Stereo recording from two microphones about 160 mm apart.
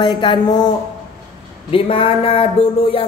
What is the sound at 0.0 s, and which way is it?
Speech, 30° left (ahead or behind).